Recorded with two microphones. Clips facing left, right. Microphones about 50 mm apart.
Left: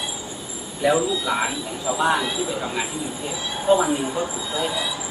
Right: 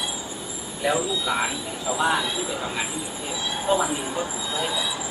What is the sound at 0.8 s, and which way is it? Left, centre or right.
Speech, centre.